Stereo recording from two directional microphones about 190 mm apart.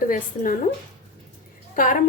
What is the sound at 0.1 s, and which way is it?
Speech, 45° left (ahead or behind).